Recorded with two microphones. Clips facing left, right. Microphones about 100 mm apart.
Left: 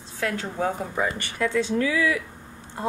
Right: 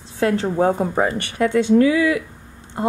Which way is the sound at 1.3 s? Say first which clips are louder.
Right 9 dB; 20° right (ahead or behind).